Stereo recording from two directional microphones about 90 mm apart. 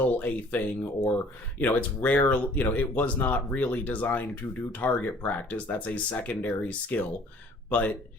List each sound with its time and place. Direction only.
0.0 s speech: 15° left (ahead or behind)